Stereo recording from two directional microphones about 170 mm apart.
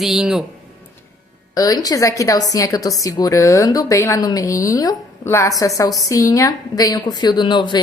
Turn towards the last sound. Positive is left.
turn(degrees=25)  # may be behind; listen again after turning